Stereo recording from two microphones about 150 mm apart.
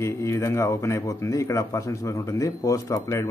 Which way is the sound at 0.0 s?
20° left (ahead or behind).